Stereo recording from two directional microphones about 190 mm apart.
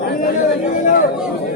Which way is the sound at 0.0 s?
45° left (ahead or behind).